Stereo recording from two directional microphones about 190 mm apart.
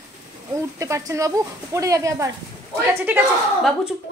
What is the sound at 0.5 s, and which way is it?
Speech, 15° right (ahead or behind).